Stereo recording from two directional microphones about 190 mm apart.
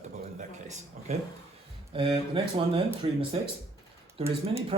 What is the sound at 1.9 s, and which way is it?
Speech, 30° right (ahead or behind).